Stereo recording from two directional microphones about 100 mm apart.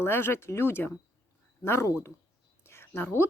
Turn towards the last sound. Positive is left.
turn(degrees=25)  # may be behind; listen again after turning